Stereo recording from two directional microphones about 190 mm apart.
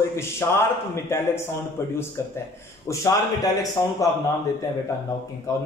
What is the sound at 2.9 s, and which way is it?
A man's voice, 15° left (ahead or behind).